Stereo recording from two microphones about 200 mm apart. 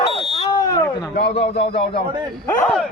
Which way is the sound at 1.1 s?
60° left (ahead or behind).